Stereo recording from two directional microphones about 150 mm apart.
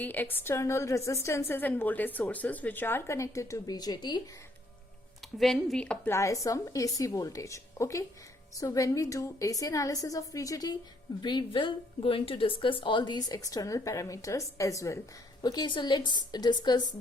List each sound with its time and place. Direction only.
0.0 s a woman's voice: 10° left (ahead or behind); by 4.2 s 30° left (ahead or behind)
5.2 s a woman's voice: centre (ahead or behind)
6.1 s speech: 20° left (ahead or behind)